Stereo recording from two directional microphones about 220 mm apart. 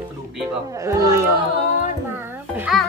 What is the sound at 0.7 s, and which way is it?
Speech, 15° right (ahead or behind).